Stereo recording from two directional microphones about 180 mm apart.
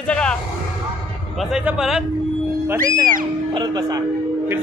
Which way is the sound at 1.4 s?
5° right (ahead or behind).